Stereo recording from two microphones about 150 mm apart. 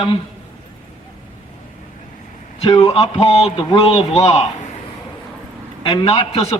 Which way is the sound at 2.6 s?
35° left (ahead or behind).